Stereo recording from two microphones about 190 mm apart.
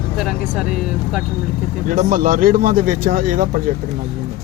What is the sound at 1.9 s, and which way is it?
Speech, 45° right (ahead or behind).